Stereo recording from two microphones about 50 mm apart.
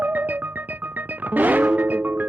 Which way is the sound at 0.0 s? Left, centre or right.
Right.